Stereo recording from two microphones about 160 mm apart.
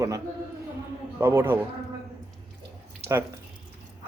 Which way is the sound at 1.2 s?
15° right (ahead or behind).